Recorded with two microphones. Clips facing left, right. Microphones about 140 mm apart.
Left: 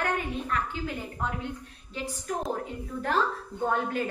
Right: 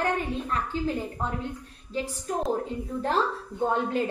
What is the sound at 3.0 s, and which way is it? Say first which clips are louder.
A woman's voice: right 1 dB; 30° right (ahead or behind).